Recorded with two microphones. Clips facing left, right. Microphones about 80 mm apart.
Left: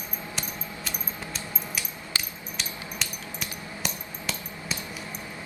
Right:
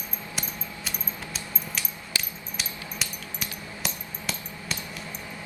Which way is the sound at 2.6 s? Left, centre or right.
Centre.